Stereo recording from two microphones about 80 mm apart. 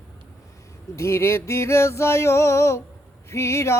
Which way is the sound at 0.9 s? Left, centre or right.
Left.